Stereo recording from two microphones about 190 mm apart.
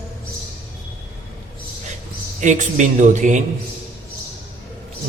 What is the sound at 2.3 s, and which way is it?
A man's voice, 40° right (ahead or behind).